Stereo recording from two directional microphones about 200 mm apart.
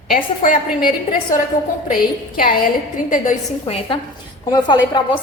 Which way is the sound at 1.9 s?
45° left (ahead or behind).